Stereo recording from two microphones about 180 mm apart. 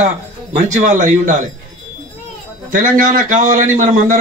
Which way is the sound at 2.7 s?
45° right (ahead or behind).